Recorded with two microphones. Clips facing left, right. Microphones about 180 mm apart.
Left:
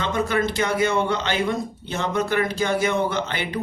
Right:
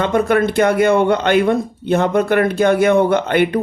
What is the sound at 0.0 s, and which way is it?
Speech, 55° right (ahead or behind).